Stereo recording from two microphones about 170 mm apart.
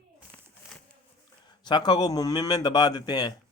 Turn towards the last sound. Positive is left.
turn(degrees=25)  # may be behind; listen again after turning